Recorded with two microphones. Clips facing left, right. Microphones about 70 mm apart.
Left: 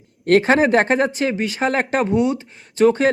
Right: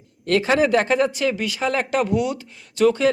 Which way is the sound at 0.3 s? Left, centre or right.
Left.